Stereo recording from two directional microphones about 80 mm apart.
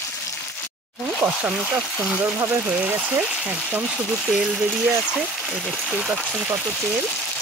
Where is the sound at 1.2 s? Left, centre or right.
Right.